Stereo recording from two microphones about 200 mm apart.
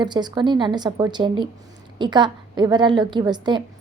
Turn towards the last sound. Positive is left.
turn(degrees=-20)  # may be behind; listen again after turning